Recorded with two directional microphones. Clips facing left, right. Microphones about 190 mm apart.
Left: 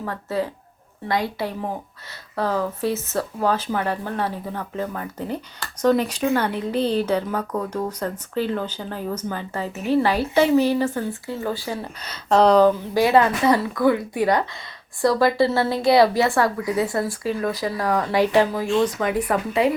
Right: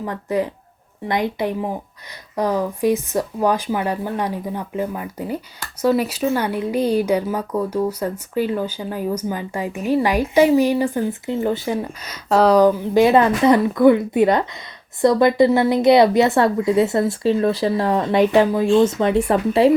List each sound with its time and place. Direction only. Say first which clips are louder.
0.0 s speech: right 4 dB; 15° right (ahead or behind)
12.0 s speech: right 1 dB; 10° right (ahead or behind); by 19.7 s 30° right (ahead or behind)